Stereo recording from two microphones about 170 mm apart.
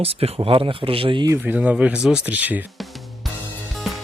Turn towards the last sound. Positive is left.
turn(degrees=0)  # may be behind; listen again after turning